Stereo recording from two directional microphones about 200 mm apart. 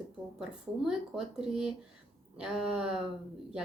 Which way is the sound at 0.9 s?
5° right (ahead or behind).